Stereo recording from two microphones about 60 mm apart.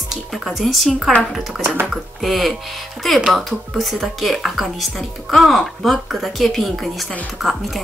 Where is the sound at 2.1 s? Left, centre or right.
Centre.